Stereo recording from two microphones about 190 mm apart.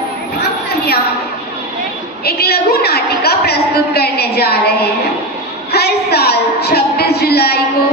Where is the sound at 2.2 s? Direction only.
55° left (ahead or behind).